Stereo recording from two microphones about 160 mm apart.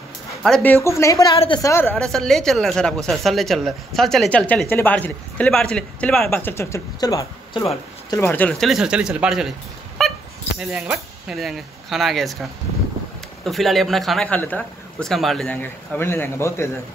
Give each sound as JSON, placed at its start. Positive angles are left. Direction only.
{"t": 0.4, "sound": "speech", "side_deg": 5}
{"t": 0.8, "sound": "a woman's voice", "side_deg": 20}
{"t": 1.3, "sound": "a woman's voice", "side_deg": 35}
{"t": 1.6, "sound": "a man's voice", "side_deg": 15}
{"t": 2.0, "sound": "speech", "side_deg": 0}
{"t": 8.2, "sound": "speech", "side_deg": 10}
{"t": 13.5, "sound": "a man's voice", "side_deg": 0}